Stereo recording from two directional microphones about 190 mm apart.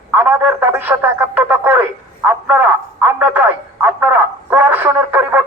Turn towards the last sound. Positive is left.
turn(degrees=-10)  # may be behind; listen again after turning